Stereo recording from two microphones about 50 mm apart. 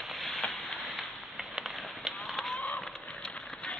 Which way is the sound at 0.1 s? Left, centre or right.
Centre.